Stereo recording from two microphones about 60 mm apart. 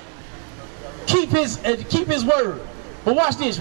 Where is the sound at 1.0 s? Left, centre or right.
Centre.